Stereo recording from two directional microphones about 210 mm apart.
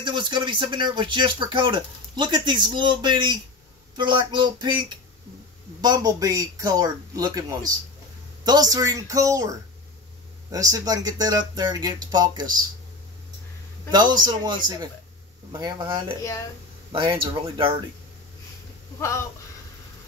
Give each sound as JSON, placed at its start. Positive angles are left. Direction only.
{"t": 0.0, "sound": "speech", "side_deg": -20}
{"t": 13.8, "sound": "speech", "side_deg": -20}
{"t": 15.6, "sound": "speech", "side_deg": -25}
{"t": 18.9, "sound": "speech", "side_deg": 15}